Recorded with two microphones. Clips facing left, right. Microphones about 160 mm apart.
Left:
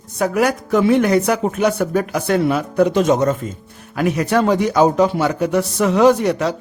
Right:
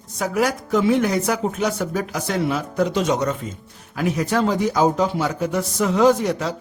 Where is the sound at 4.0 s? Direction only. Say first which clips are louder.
Left 4 dB; 65° left (ahead or behind).